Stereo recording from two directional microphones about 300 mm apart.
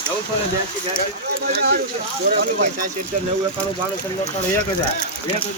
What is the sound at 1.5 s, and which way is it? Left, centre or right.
Speech, right.